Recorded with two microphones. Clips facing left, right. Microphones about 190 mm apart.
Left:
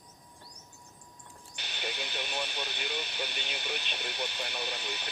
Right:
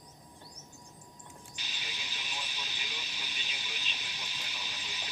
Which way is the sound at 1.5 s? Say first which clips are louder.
Left 12 dB; 65° left (ahead or behind).